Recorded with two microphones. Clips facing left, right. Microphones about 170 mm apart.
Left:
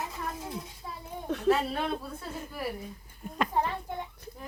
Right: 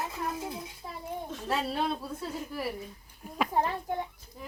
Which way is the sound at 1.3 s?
65° left (ahead or behind).